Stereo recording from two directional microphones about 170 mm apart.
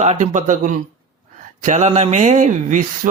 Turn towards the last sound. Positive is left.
turn(degrees=-50)  # may be behind; listen again after turning